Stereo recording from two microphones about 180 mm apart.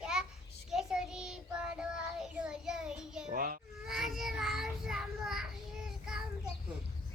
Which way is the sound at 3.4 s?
50° right (ahead or behind).